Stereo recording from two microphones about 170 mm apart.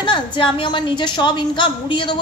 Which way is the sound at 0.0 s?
25° left (ahead or behind).